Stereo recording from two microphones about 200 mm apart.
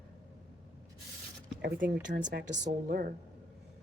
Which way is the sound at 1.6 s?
55° right (ahead or behind).